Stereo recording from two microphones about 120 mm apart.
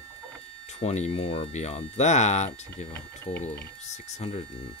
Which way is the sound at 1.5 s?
70° left (ahead or behind).